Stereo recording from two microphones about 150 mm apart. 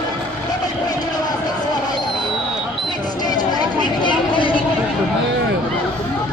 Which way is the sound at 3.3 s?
30° left (ahead or behind).